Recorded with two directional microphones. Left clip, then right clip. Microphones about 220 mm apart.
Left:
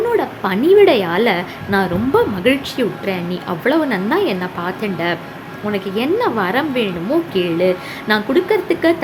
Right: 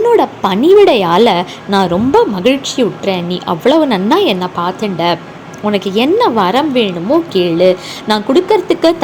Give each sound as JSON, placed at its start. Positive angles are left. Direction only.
{"t": 0.1, "sound": "a woman's voice", "side_deg": -20}